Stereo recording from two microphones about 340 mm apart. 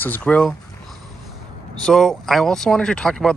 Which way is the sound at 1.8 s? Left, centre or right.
Centre.